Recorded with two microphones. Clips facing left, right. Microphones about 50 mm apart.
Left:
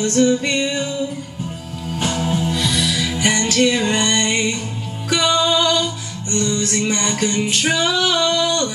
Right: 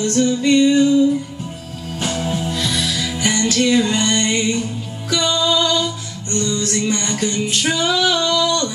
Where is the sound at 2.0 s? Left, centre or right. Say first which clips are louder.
Left 1 dB; centre.